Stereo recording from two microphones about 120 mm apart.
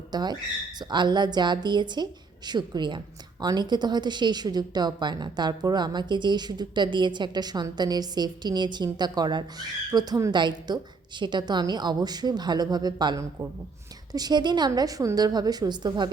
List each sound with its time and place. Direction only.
0.1 s a woman's voice: 35° right (ahead or behind)